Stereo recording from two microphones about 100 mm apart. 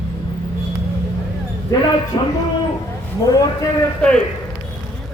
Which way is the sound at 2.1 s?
50° left (ahead or behind).